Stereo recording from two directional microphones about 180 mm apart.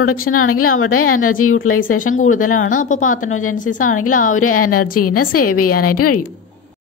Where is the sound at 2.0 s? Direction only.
45° left (ahead or behind).